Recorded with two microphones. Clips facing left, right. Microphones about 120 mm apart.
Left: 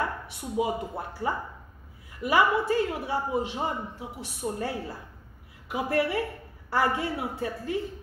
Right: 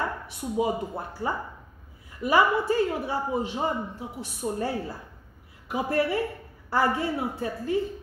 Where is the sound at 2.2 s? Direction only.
35° right (ahead or behind).